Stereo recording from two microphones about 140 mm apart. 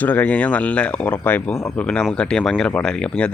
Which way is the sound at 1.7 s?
10° left (ahead or behind).